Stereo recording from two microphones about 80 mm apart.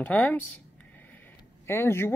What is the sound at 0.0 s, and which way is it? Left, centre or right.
Speech, left.